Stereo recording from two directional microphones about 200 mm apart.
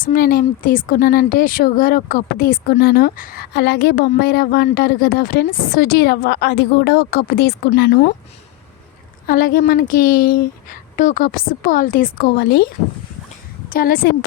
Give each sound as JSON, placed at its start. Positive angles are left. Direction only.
{"t": 0.0, "sound": "speech", "side_deg": 45}
{"t": 9.2, "sound": "speech", "side_deg": 45}
{"t": 13.7, "sound": "a woman's voice", "side_deg": 45}